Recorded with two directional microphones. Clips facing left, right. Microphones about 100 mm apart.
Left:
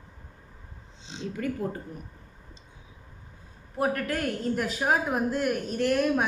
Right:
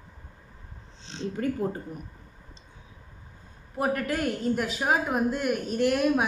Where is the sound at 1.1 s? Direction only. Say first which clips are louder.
Right 1 dB; 10° left (ahead or behind).